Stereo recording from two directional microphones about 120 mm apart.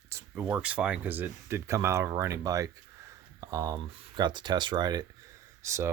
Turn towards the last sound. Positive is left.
turn(degrees=-25)  # may be behind; listen again after turning